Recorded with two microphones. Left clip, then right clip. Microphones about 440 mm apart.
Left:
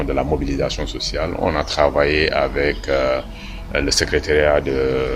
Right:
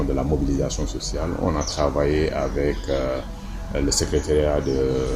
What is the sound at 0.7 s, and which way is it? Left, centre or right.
Speech, centre.